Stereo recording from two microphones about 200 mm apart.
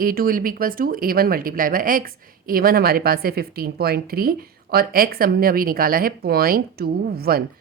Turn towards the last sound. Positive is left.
turn(degrees=-50)  # may be behind; listen again after turning